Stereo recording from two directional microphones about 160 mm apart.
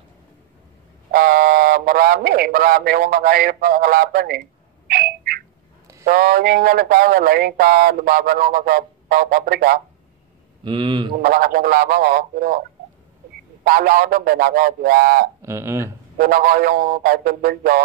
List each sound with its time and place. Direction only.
1.1 s speech: 65° right (ahead or behind)
4.8 s a sound: 70° right (ahead or behind)
6.0 s speech: 65° right (ahead or behind)
10.6 s speech: 30° right (ahead or behind)
11.1 s speech: 65° right (ahead or behind)
13.7 s speech: 60° right (ahead or behind)
15.4 s speech: 15° right (ahead or behind)
16.2 s speech: 65° right (ahead or behind)